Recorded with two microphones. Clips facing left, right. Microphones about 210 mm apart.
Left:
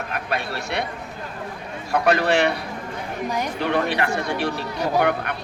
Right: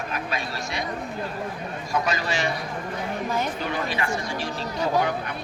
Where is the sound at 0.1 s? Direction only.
60° left (ahead or behind).